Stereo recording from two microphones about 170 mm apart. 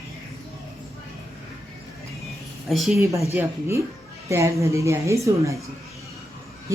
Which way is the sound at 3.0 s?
15° right (ahead or behind).